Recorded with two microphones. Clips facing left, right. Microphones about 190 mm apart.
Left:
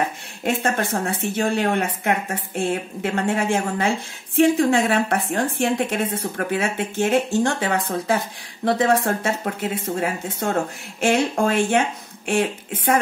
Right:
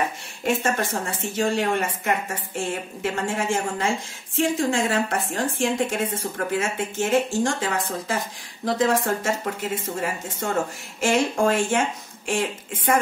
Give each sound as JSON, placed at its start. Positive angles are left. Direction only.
{"t": 0.5, "sound": "a woman's voice", "side_deg": 60}